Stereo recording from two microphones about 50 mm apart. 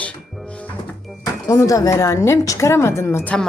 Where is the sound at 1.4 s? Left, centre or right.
Left.